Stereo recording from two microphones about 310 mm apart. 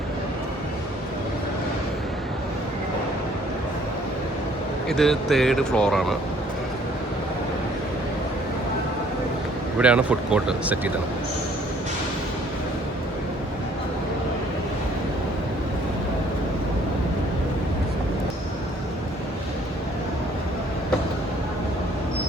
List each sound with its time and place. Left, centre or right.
4.9 s speech: centre
9.7 s speech: centre